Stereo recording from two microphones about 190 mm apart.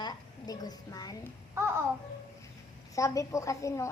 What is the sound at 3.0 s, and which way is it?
Speech, 15° left (ahead or behind).